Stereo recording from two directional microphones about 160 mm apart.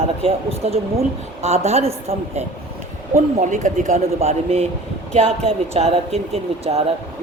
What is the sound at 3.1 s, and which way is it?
Speech, 50° right (ahead or behind).